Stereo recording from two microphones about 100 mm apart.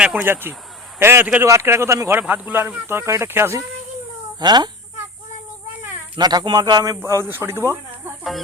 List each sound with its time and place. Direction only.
0.0 s speech: 15° right (ahead or behind)
2.2 s speech: 15° right (ahead or behind)
4.4 s speech: 45° right (ahead or behind)
6.1 s speech: 45° right (ahead or behind); by 8.1 s 25° right (ahead or behind)